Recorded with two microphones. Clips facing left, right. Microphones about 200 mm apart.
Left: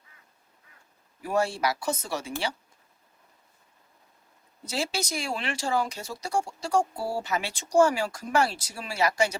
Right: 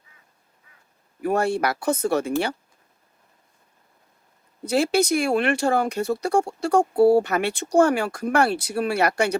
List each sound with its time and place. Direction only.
1.2 s speech: 60° right (ahead or behind)
4.6 s speech: 60° right (ahead or behind)